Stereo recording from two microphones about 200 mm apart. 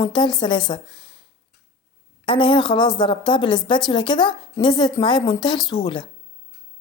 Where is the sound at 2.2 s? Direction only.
25° left (ahead or behind).